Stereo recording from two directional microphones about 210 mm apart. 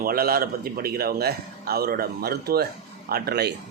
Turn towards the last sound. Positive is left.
turn(degrees=-50)  # may be behind; listen again after turning